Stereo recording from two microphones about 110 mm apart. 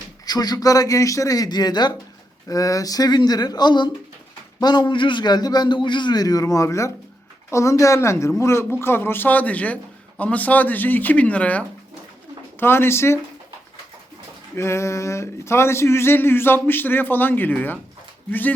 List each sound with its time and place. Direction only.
0.3 s a man's voice: 35° left (ahead or behind)
14.5 s speech: 25° left (ahead or behind)